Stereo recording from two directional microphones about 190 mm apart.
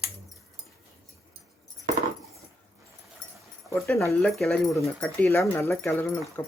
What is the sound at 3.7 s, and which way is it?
Speech, 15° left (ahead or behind).